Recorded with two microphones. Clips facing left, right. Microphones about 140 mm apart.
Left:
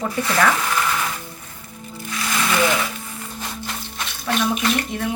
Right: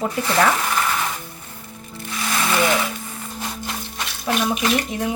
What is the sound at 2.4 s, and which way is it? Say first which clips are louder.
Speech: even; 10° right (ahead or behind).